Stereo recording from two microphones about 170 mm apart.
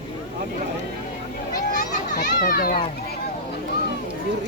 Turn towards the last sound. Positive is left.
turn(degrees=55)  # may be behind; listen again after turning